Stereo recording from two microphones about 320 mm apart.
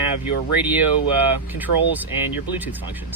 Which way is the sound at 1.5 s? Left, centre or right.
Centre.